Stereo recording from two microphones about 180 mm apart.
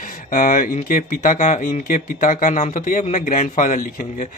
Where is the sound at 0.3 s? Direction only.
45° left (ahead or behind).